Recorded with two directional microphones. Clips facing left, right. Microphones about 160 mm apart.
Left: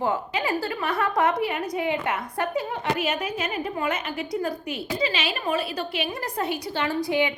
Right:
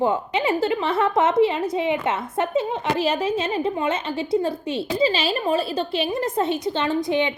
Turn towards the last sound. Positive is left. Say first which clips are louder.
# right 2 dB
turn(degrees=-20)  # may be behind; listen again after turning